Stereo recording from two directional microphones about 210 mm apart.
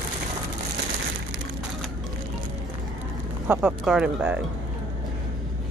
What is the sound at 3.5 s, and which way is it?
Speech, 5° right (ahead or behind).